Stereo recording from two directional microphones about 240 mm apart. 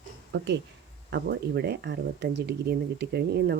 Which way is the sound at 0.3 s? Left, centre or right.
Right.